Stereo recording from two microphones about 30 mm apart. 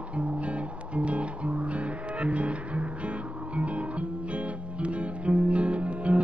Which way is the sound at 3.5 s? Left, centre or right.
Right.